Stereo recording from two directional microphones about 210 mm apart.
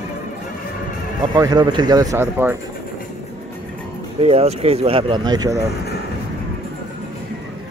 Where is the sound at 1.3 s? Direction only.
20° right (ahead or behind).